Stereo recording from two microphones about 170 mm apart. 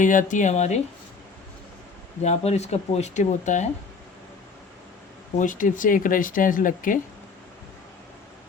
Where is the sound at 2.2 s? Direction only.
40° left (ahead or behind).